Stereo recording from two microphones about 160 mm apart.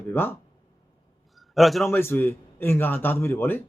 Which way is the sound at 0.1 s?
15° left (ahead or behind).